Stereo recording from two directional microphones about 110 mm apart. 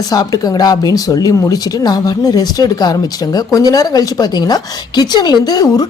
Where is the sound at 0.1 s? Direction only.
35° left (ahead or behind).